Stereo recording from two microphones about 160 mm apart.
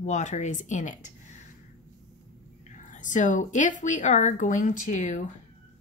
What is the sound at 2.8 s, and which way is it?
Speech, 55° left (ahead or behind).